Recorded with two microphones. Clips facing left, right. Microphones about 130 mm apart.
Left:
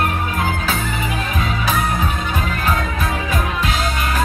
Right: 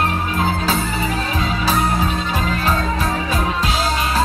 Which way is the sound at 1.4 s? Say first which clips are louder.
Right 1 dB; 35° right (ahead or behind).